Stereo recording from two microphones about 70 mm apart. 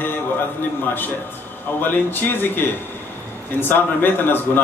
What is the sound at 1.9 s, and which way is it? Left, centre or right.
A man's voice, left.